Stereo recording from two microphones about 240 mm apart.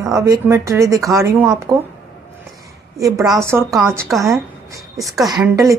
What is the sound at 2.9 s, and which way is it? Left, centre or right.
Speech, centre.